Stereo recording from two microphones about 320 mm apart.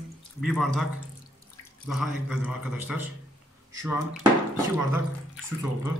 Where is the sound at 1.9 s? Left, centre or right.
Centre.